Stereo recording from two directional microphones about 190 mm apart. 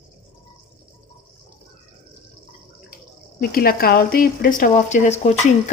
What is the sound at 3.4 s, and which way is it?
Speech, 50° left (ahead or behind).